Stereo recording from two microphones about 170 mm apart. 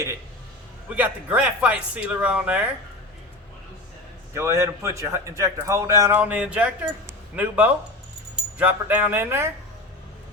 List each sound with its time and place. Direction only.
0.9 s speech: 10° right (ahead or behind)
4.4 s speech: 15° right (ahead or behind)